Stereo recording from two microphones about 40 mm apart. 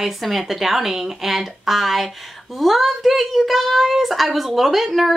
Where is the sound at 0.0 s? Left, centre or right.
Centre.